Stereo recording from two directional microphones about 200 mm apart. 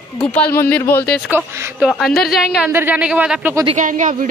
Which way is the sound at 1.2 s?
10° right (ahead or behind).